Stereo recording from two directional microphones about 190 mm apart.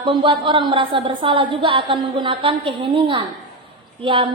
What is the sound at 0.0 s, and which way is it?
A woman's voice, 30° right (ahead or behind).